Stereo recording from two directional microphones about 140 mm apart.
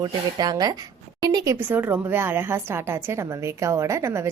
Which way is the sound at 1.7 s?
15° right (ahead or behind).